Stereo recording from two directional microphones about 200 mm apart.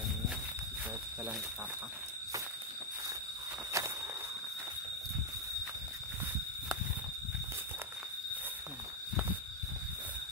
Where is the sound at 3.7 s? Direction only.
15° right (ahead or behind).